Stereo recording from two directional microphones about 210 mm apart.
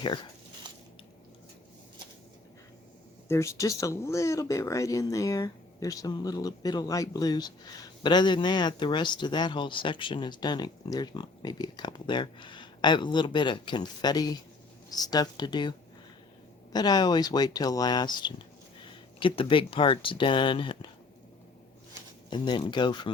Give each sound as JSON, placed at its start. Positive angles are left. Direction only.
{"t": 3.2, "sound": "speech", "side_deg": 15}
{"t": 16.7, "sound": "speech", "side_deg": 20}
{"t": 22.3, "sound": "speech", "side_deg": 20}